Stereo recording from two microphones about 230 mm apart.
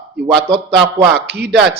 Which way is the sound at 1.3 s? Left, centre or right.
Right.